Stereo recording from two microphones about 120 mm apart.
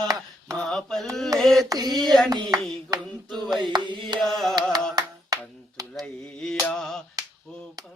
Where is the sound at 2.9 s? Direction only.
35° right (ahead or behind).